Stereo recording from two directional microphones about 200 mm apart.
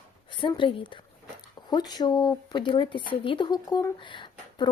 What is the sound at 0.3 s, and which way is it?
Speech, 25° left (ahead or behind).